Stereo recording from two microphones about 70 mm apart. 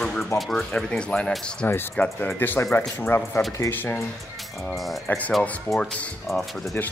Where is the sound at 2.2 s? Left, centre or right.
Left.